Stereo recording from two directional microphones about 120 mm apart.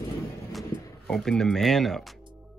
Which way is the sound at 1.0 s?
5° left (ahead or behind).